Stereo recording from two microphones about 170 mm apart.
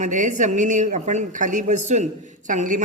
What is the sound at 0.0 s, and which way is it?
A woman's voice, 50° right (ahead or behind).